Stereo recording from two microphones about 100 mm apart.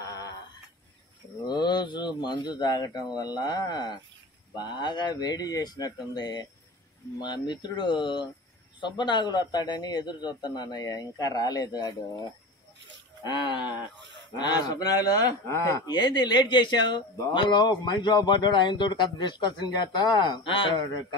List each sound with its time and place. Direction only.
0.0 s a sound: 30° left (ahead or behind)
1.5 s speech: 50° left (ahead or behind)
13.2 s speech: 50° left (ahead or behind)
15.4 s speech: 25° left (ahead or behind)
15.9 s speech: 45° left (ahead or behind)